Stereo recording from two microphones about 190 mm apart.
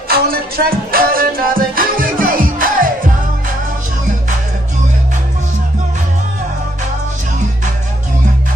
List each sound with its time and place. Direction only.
0.1 s music: 50° right (ahead or behind)